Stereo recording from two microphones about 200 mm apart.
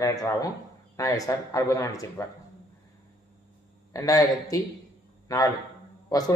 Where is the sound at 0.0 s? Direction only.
15° left (ahead or behind).